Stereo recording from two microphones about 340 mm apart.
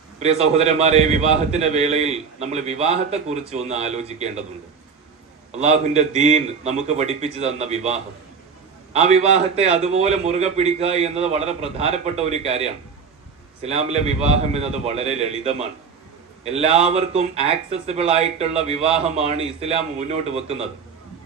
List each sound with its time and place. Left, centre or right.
0.2 s a man's voice: centre
5.5 s a man's voice: centre